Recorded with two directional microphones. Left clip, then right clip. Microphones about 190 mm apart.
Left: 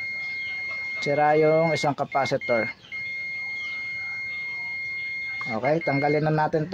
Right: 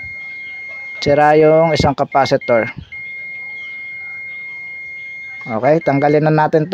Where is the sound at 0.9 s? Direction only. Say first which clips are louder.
Right 10 dB; 45° right (ahead or behind).